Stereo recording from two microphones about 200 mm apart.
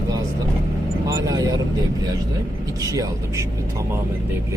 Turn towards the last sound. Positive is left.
turn(degrees=-15)  # may be behind; listen again after turning